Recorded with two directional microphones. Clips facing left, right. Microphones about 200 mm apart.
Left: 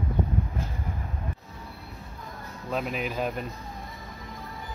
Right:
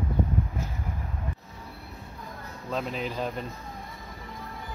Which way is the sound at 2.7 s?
10° left (ahead or behind).